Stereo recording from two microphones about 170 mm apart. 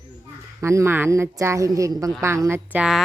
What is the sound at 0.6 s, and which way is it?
Speech, 15° right (ahead or behind).